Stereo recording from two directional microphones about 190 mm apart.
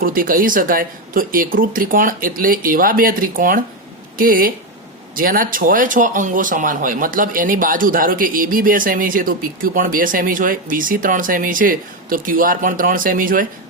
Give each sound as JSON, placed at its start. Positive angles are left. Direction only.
{"t": 0.0, "sound": "speech", "side_deg": -45}